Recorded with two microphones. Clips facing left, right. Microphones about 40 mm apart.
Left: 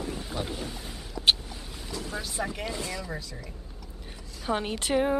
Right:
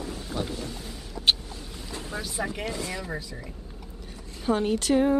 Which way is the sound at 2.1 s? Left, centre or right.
Centre.